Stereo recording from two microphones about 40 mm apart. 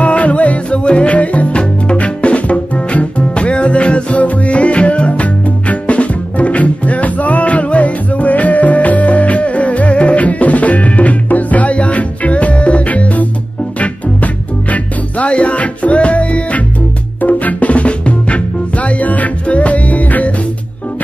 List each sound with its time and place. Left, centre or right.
0.0 s music: left
17.2 s music: left